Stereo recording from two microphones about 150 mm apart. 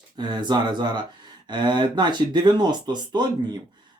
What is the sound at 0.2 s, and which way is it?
Speech, 30° right (ahead or behind).